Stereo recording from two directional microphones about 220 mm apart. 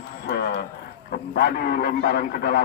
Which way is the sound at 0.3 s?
50° left (ahead or behind).